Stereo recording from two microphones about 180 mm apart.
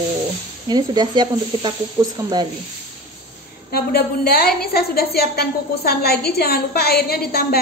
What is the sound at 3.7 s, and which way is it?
A woman's voice, 60° left (ahead or behind).